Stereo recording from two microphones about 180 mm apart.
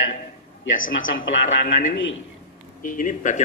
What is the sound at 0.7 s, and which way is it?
Speech, 90° left.